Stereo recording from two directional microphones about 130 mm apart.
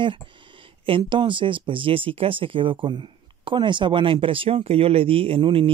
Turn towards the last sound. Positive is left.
turn(degrees=-45)  # may be behind; listen again after turning